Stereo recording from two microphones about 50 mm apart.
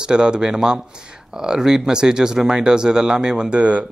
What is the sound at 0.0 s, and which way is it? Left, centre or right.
Speech, centre.